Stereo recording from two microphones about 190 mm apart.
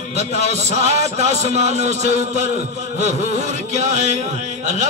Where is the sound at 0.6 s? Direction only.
35° right (ahead or behind).